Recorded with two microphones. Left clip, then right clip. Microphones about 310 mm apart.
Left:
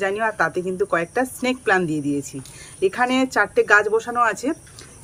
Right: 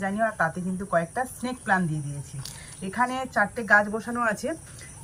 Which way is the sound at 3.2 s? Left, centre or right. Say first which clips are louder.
Left 7 dB; left.